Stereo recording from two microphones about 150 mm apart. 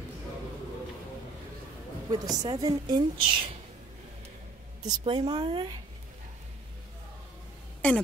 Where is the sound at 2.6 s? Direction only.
25° right (ahead or behind).